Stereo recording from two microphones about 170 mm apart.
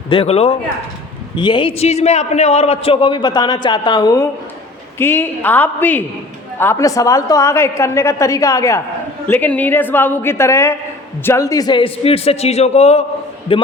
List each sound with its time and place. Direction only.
0.1 s a man's voice: 35° left (ahead or behind)